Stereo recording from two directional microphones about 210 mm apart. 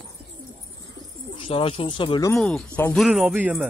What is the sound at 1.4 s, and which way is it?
Speech, 25° left (ahead or behind).